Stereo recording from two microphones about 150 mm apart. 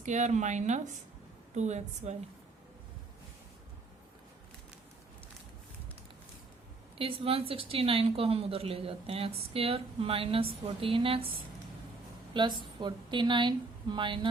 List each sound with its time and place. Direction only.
0.0 s speech: 50° right (ahead or behind)
7.0 s a woman's voice: 40° right (ahead or behind)
12.3 s speech: 30° right (ahead or behind)